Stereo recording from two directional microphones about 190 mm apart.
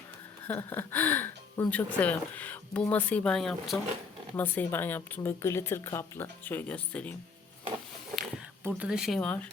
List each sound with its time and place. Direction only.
0.4 s speech: 10° left (ahead or behind)
8.6 s speech: 5° right (ahead or behind)